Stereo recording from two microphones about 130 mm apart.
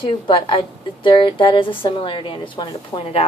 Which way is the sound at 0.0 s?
40° left (ahead or behind).